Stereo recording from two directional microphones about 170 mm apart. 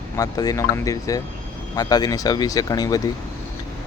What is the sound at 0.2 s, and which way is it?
Speech, 20° left (ahead or behind).